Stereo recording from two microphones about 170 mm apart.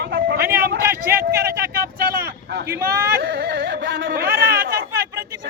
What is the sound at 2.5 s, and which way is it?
Speech, 65° right (ahead or behind).